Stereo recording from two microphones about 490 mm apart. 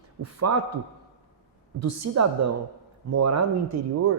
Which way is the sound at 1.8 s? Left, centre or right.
Right.